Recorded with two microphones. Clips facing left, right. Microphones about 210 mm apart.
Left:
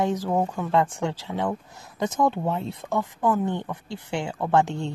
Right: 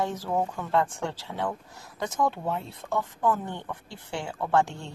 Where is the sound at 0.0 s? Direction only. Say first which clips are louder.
Left 4 dB; 15° left (ahead or behind).